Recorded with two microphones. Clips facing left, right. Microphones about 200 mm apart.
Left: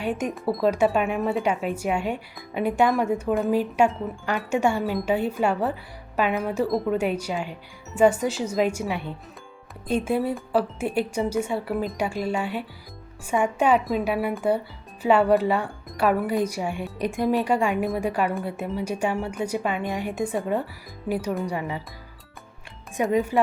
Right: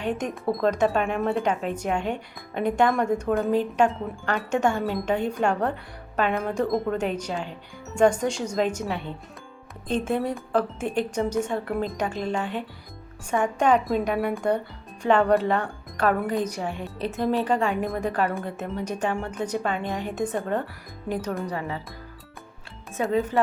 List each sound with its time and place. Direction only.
0.0 s speech: 10° left (ahead or behind)
23.0 s speech: 15° left (ahead or behind)